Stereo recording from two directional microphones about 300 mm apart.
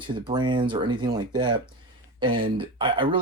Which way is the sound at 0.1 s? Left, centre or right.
Centre.